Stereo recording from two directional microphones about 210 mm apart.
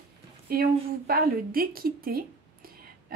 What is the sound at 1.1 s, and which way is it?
Speech, 45° right (ahead or behind).